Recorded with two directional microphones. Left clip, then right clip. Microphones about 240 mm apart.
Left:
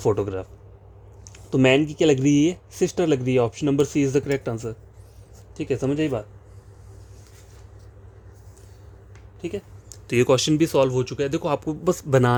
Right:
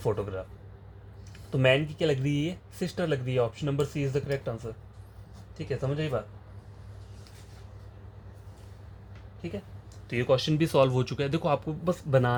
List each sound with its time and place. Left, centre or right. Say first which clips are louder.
0.0 s speech: left 8 dB; left
1.5 s speech: left 6 dB; left
10.1 s speech: left 7 dB; left
10.5 s speech: left 5 dB; centre